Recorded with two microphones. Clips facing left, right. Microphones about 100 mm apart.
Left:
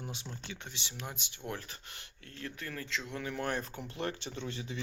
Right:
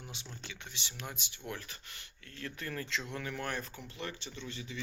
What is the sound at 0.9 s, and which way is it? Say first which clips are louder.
Speech: left 1 dB; 20° left (ahead or behind).